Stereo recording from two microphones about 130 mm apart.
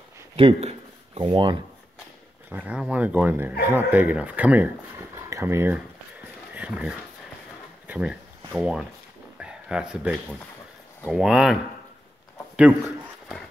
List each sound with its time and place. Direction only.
0.4 s speech: 50° right (ahead or behind)
2.5 s speech: 10° right (ahead or behind)
5.1 s a sound: 20° right (ahead or behind)
6.5 s speech: 10° right (ahead or behind)
7.8 s a sound: 10° right (ahead or behind)
11.1 s speech: 5° right (ahead or behind)